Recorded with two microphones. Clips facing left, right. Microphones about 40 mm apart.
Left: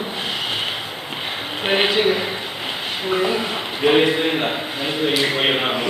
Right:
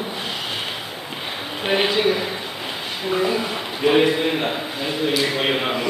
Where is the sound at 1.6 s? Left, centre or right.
Left.